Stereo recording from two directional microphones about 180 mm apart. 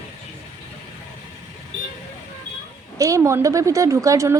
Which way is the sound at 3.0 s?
15° right (ahead or behind).